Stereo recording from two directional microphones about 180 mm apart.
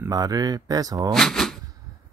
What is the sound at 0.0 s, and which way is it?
Speech, 20° right (ahead or behind).